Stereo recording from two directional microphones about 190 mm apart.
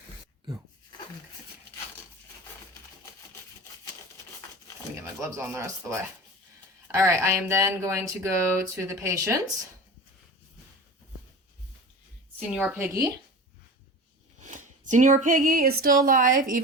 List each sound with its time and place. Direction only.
5.3 s speech: 15° right (ahead or behind)
7.0 s speech: 15° right (ahead or behind)
12.4 s speech: 5° right (ahead or behind)
14.4 s speech: 40° right (ahead or behind)